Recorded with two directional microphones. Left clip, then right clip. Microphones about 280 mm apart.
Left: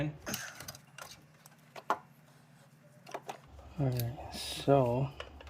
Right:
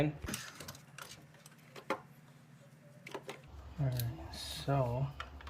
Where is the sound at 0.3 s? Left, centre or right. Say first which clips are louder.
Left 3 dB; centre.